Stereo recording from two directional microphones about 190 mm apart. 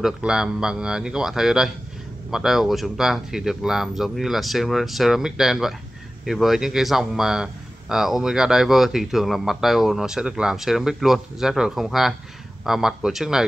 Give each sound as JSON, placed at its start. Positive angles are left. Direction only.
{"t": 0.0, "sound": "speech", "side_deg": -5}